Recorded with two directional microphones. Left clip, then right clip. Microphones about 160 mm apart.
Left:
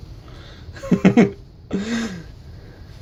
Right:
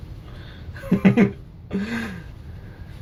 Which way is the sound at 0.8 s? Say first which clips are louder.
Left 3 dB; 55° left (ahead or behind).